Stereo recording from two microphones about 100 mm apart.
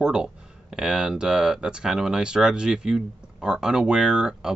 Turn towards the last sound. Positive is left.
turn(degrees=-5)  # may be behind; listen again after turning